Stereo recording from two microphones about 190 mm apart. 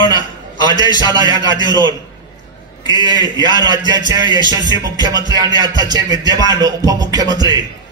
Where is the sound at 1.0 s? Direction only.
20° right (ahead or behind).